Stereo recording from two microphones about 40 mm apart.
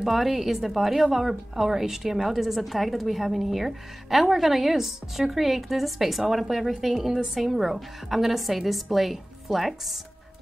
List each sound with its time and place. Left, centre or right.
0.0 s a woman's voice: centre